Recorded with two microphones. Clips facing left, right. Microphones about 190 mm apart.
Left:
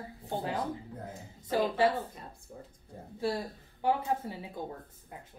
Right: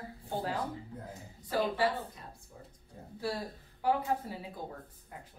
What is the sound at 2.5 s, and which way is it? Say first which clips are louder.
Speech: left 5 dB; 55° left (ahead or behind).